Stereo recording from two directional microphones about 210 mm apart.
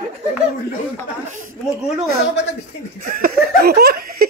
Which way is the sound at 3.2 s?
45° right (ahead or behind).